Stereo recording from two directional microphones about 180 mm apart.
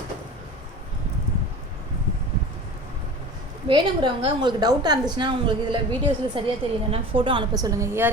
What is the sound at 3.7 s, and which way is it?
A woman's voice, 25° right (ahead or behind).